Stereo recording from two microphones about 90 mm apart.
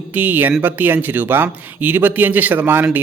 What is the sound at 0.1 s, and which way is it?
Speech, 20° right (ahead or behind).